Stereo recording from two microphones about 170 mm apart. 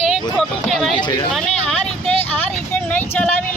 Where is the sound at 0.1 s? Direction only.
Centre (ahead or behind).